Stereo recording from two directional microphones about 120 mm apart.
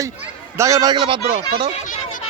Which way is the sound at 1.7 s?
90° left.